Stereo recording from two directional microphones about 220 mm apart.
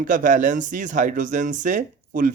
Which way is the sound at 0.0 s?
35° right (ahead or behind).